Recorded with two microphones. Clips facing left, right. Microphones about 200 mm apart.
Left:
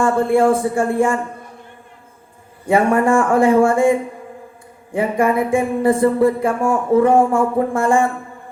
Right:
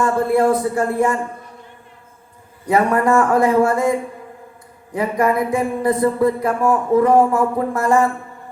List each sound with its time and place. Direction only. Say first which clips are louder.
0.0 s music: left 2 dB; 30° left (ahead or behind)
2.6 s music: left 1 dB; 25° left (ahead or behind)